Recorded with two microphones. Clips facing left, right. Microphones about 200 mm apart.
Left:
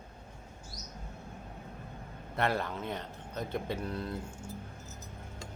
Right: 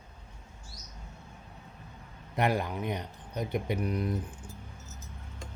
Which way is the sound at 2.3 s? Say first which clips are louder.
Right 3 dB; 15° right (ahead or behind).